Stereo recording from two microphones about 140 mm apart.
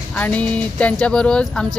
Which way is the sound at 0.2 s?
10° left (ahead or behind).